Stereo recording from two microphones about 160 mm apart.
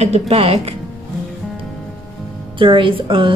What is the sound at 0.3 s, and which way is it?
Speech, 40° right (ahead or behind).